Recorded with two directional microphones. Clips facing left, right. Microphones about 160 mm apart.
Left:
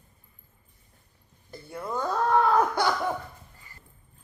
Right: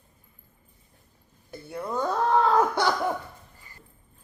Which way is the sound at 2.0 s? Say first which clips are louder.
Even; 25° right (ahead or behind).